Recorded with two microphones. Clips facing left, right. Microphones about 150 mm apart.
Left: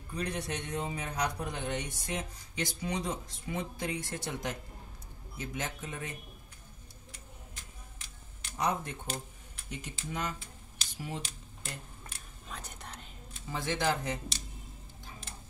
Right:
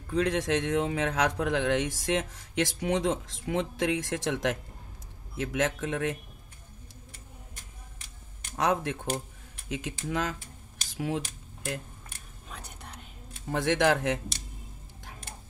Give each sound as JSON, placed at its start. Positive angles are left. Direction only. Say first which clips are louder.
{"t": 0.0, "sound": "a man's voice", "louder": "right 9 dB", "side_deg": -90}
{"t": 8.5, "sound": "a man's voice", "louder": "right 5 dB", "side_deg": -90}
{"t": 11.2, "sound": "a sound", "louder": "right 9 dB", "side_deg": -70}
{"t": 13.5, "sound": "speech", "louder": "right 7 dB", "side_deg": -75}